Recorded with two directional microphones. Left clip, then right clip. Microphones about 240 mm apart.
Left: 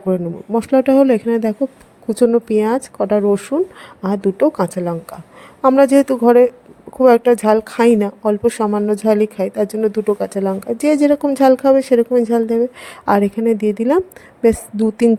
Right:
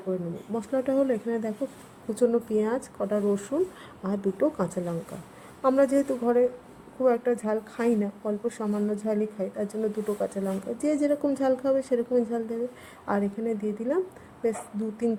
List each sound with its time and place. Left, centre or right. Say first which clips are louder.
0.1 s a woman's voice: left 13 dB; left